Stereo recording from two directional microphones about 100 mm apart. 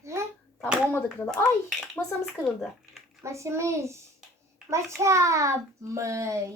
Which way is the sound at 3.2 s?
30° right (ahead or behind).